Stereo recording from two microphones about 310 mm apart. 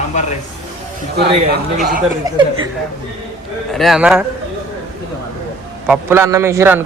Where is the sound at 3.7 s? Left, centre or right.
Centre.